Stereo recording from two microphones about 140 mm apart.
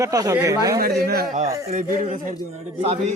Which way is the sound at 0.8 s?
90° right.